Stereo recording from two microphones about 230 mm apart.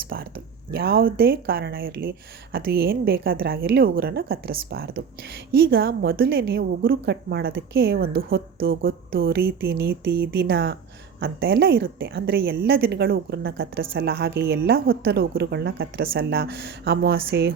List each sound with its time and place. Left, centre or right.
0.7 s a woman's voice: right